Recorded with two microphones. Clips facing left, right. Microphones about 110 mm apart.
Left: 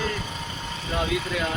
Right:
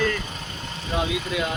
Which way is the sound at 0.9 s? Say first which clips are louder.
Right 1 dB; 10° right (ahead or behind).